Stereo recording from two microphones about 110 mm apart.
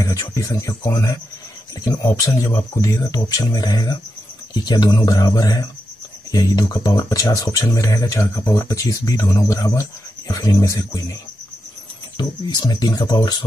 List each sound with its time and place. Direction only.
0.0 s speech: 30° left (ahead or behind)
12.2 s speech: 40° left (ahead or behind)